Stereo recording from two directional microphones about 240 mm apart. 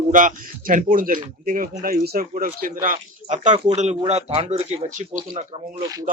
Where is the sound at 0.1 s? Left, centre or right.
Right.